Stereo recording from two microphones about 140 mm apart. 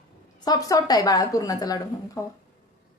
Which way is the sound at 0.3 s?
30° left (ahead or behind).